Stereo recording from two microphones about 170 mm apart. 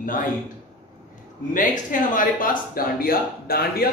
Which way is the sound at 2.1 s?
55° left (ahead or behind).